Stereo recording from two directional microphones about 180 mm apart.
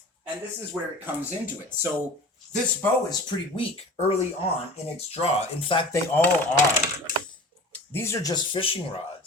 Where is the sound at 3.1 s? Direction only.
30° left (ahead or behind).